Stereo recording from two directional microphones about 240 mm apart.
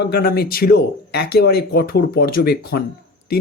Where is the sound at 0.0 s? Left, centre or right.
Left.